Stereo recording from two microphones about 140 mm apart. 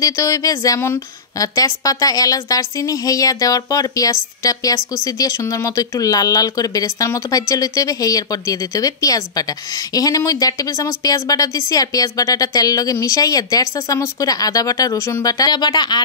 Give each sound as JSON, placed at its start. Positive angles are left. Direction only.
{"t": 0.0, "sound": "a woman's voice", "side_deg": 25}